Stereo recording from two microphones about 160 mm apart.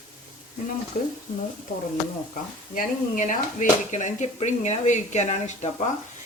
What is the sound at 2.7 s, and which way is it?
Speech, 55° left (ahead or behind).